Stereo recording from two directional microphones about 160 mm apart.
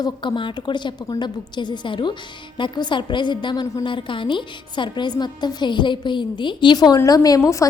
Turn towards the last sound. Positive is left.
turn(degrees=20)  # may be behind; listen again after turning